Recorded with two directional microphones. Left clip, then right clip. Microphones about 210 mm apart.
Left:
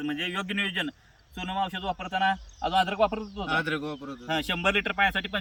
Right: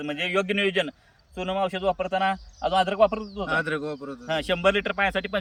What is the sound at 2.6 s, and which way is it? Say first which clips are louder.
A man's voice: right 4 dB; 10° right (ahead or behind).